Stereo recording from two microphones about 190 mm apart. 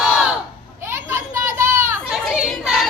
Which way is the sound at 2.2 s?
Centre (ahead or behind).